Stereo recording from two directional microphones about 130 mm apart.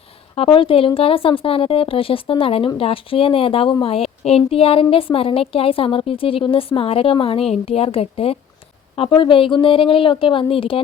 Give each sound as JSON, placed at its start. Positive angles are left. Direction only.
{"t": 0.3, "sound": "speech", "side_deg": 45}